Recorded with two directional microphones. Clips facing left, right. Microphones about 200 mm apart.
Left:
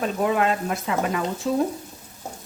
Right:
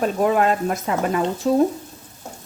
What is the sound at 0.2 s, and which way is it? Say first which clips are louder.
A woman's voice: right 3 dB; 45° right (ahead or behind).